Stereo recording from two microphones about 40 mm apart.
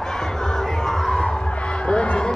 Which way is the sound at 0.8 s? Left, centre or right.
Centre.